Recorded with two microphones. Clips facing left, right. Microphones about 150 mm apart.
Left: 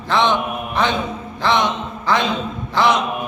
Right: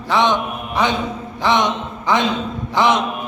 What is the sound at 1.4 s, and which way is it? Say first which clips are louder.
Speech: right 1 dB; 15° right (ahead or behind).